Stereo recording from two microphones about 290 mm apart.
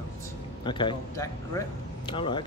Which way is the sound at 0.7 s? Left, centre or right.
Centre.